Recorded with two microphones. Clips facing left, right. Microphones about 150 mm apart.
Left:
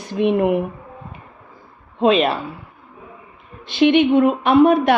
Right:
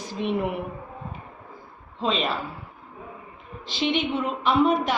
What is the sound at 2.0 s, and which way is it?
Speech, 65° left (ahead or behind).